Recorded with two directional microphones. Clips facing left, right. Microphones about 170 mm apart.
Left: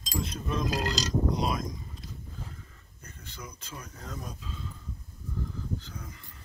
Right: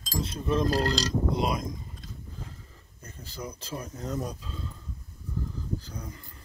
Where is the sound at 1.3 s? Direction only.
25° right (ahead or behind).